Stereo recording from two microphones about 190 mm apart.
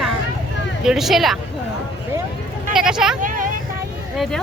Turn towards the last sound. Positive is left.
turn(degrees=0)  # may be behind; listen again after turning